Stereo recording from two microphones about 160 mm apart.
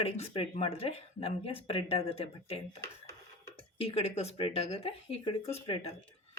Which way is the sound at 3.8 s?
40° left (ahead or behind).